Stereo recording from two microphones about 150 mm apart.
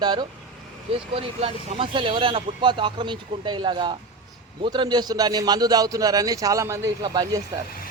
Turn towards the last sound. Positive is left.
turn(degrees=-25)  # may be behind; listen again after turning